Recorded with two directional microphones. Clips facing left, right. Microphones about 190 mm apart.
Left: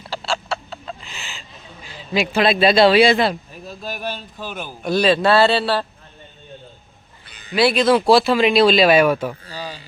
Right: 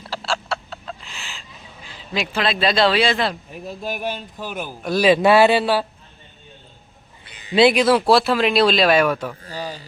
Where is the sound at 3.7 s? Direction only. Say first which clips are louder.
Right 2 dB; 20° right (ahead or behind).